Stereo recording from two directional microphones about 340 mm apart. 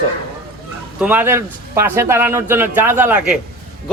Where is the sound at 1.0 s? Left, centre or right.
Centre.